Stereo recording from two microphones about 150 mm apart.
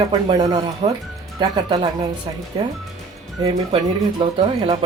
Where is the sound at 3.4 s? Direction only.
35° right (ahead or behind).